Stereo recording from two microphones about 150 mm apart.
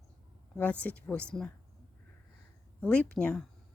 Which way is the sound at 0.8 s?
10° left (ahead or behind).